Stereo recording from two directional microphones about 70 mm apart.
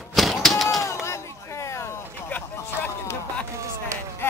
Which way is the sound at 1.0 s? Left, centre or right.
Left.